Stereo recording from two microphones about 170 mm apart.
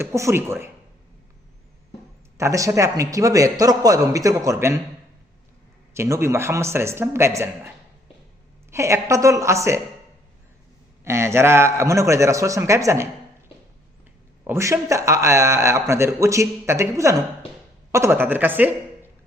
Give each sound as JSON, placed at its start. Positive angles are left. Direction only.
{"t": 0.0, "sound": "a man's voice", "side_deg": -15}
{"t": 2.4, "sound": "a man's voice", "side_deg": -20}
{"t": 5.9, "sound": "a man's voice", "side_deg": -15}
{"t": 8.7, "sound": "a man's voice", "side_deg": -15}
{"t": 11.0, "sound": "a man's voice", "side_deg": -15}
{"t": 14.4, "sound": "a man's voice", "side_deg": -15}